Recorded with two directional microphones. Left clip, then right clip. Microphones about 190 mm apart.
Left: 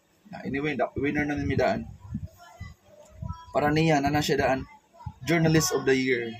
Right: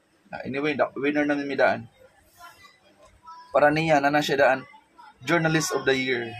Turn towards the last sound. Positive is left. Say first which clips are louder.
# even
turn(degrees=15)  # may be behind; listen again after turning